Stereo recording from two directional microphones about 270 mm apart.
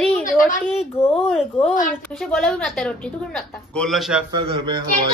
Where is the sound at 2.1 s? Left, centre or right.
Centre.